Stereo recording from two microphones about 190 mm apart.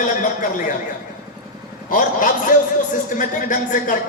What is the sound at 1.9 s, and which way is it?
A man's voice, 45° left (ahead or behind).